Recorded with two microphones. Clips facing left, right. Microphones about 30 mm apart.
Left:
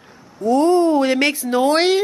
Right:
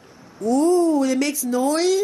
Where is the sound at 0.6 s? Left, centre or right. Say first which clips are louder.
Left 2 dB; left.